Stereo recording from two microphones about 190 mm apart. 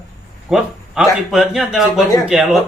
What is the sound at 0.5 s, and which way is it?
Speech, centre (ahead or behind).